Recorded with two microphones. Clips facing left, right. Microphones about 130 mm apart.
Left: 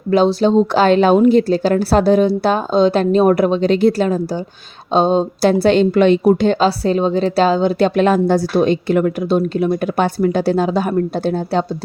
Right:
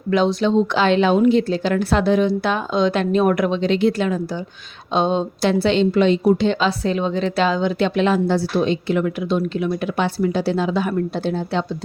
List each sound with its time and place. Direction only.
0.1 s a woman's voice: 35° left (ahead or behind)